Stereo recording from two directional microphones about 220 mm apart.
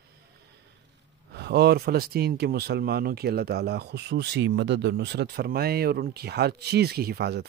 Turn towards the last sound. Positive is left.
turn(degrees=-50)  # may be behind; listen again after turning